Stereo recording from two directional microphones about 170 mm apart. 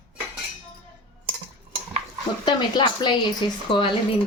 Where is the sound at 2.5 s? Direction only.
25° left (ahead or behind).